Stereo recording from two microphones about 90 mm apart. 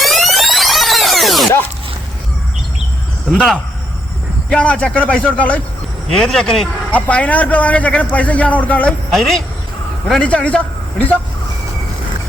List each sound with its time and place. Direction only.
0.0 s music: centre (ahead or behind)
3.3 s a man's voice: 5° left (ahead or behind)
6.1 s speech: 5° left (ahead or behind)
6.9 s a man's voice: 15° left (ahead or behind)
9.0 s speech: centre (ahead or behind)
10.2 s a man's voice: 15° left (ahead or behind)